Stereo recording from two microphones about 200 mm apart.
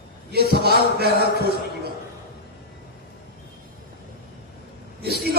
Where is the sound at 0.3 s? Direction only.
50° right (ahead or behind).